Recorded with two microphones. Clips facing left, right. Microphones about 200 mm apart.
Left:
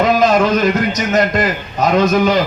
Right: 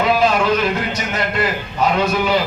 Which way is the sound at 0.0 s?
40° left (ahead or behind).